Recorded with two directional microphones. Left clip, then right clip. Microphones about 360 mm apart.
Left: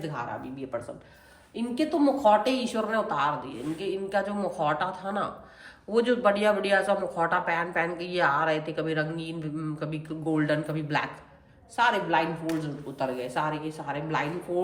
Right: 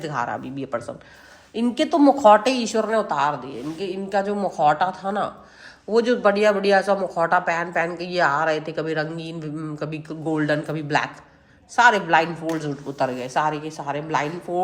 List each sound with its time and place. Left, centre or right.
0.0 s a woman's voice: right